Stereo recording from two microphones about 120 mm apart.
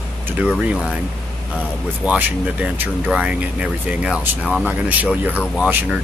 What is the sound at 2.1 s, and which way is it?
Speech, 10° right (ahead or behind).